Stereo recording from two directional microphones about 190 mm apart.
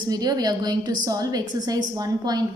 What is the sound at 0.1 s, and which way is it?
A woman's voice, 20° right (ahead or behind).